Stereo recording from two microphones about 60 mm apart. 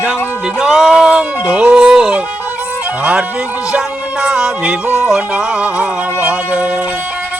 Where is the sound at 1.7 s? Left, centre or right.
Centre.